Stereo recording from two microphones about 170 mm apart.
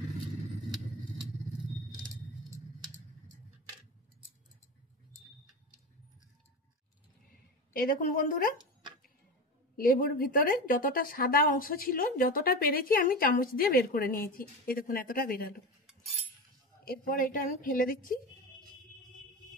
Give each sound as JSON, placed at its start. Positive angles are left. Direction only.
{"t": 7.7, "sound": "a woman's voice", "side_deg": 55}
{"t": 9.8, "sound": "speech", "side_deg": 55}
{"t": 16.8, "sound": "speech", "side_deg": 55}